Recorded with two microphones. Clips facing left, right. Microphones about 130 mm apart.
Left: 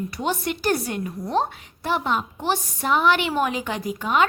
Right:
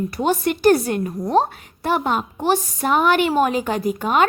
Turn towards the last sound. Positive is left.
turn(degrees=-45)  # may be behind; listen again after turning